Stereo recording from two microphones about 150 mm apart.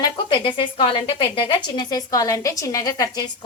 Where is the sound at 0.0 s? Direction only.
30° left (ahead or behind).